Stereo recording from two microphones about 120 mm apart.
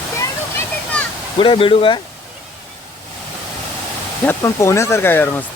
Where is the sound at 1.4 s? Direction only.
45° left (ahead or behind).